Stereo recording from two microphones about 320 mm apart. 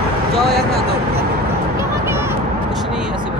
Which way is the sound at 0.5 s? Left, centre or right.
Right.